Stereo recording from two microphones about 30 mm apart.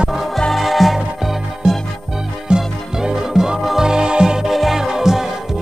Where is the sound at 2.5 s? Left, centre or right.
Right.